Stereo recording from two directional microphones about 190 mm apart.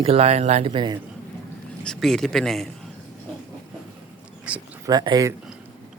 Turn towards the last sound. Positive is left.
turn(degrees=-20)  # may be behind; listen again after turning